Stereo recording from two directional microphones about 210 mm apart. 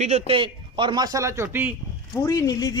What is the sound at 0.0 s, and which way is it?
A man's voice, 30° right (ahead or behind).